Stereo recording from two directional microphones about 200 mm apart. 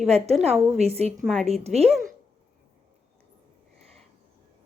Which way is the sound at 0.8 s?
30° right (ahead or behind).